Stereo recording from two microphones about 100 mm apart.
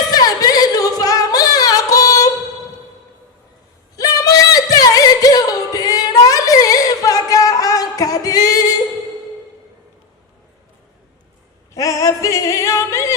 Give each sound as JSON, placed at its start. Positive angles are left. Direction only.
{"t": 0.1, "sound": "singing", "side_deg": 40}
{"t": 3.9, "sound": "singing", "side_deg": 40}
{"t": 11.7, "sound": "female singing", "side_deg": 35}